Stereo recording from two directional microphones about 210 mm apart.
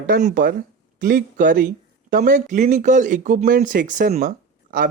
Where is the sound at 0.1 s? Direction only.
40° right (ahead or behind).